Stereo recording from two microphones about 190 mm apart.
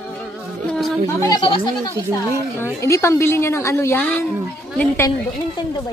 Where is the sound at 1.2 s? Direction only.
20° left (ahead or behind).